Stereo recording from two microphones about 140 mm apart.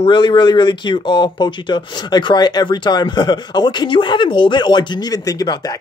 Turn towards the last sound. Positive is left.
turn(degrees=25)  # may be behind; listen again after turning